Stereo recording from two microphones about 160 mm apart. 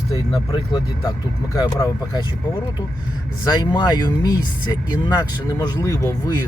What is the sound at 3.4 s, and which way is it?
Speech, 25° left (ahead or behind).